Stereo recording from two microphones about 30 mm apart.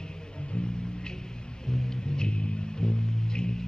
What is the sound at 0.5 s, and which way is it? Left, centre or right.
Music, left.